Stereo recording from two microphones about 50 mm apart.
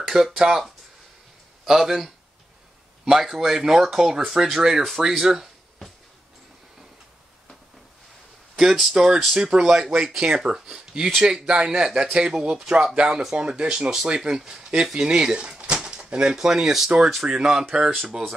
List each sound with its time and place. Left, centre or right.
0.0 s speech: centre
1.7 s speech: centre
8.5 s speech: centre
8.9 s speech: centre
11.4 s speech: centre
16.3 s speech: centre